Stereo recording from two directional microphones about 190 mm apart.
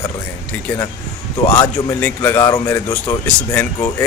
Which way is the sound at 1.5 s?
10° left (ahead or behind).